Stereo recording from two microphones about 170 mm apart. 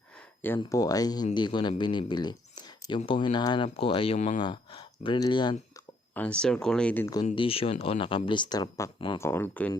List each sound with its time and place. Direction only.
0.2 s speech: 10° left (ahead or behind)
6.1 s speech: 5° left (ahead or behind)
7.3 s speech: 35° left (ahead or behind)
9.1 s speech: 15° left (ahead or behind)